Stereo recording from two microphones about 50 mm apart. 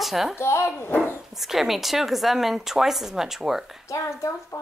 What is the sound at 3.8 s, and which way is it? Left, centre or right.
Speech, left.